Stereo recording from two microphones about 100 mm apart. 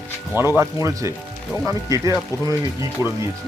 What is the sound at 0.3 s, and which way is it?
Speech, 25° right (ahead or behind).